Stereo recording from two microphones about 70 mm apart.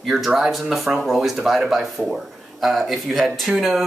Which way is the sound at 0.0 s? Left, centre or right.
Centre.